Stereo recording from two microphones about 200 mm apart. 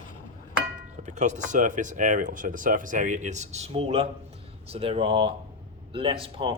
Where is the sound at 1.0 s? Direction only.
35° right (ahead or behind).